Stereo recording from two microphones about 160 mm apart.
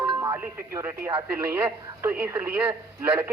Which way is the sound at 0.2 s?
20° right (ahead or behind).